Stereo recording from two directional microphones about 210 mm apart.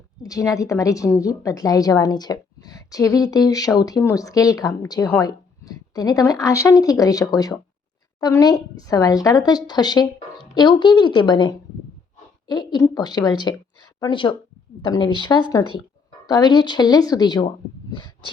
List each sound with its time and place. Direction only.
0.2 s a woman's voice: 15° left (ahead or behind)